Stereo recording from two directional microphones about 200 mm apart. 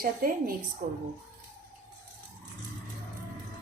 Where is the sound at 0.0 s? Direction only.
45° right (ahead or behind).